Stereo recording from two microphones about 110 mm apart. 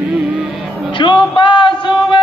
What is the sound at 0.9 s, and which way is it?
Music, 45° left (ahead or behind).